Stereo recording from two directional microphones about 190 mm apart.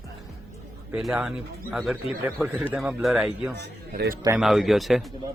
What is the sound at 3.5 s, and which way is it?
Speech, 55° right (ahead or behind).